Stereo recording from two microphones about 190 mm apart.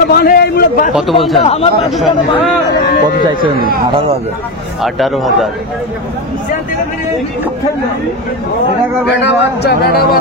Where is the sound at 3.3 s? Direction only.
50° right (ahead or behind).